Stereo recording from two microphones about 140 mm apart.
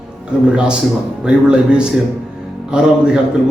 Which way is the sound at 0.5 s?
5° right (ahead or behind).